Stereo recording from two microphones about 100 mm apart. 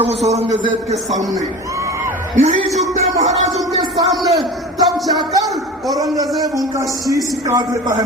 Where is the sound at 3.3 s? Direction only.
90° right.